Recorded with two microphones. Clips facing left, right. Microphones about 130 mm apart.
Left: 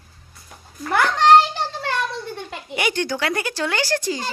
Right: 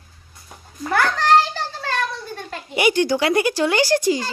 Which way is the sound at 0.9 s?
20° left (ahead or behind).